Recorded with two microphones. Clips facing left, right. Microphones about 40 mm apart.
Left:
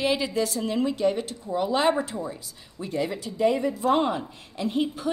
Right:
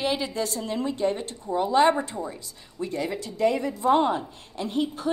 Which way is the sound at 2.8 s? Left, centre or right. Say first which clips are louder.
Left 1 dB; centre.